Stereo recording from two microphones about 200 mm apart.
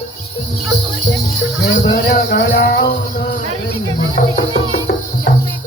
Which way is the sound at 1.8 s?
45° left (ahead or behind).